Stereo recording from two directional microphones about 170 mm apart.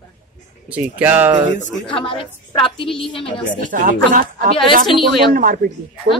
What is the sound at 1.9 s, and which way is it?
Speech, 30° left (ahead or behind).